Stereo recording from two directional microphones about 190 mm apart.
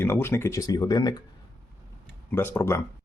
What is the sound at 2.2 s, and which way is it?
Speech, 10° left (ahead or behind).